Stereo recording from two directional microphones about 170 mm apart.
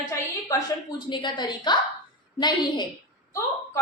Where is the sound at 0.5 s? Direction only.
20° left (ahead or behind).